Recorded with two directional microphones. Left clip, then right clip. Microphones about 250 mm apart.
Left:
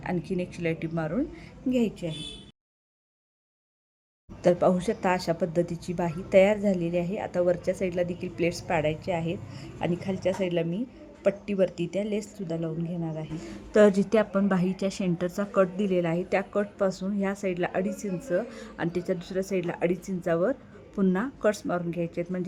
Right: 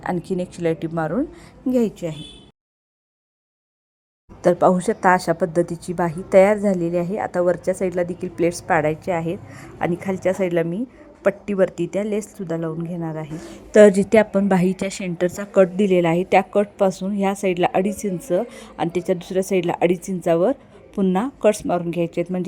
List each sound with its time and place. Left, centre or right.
0.0 s a woman's voice: centre
4.4 s a woman's voice: centre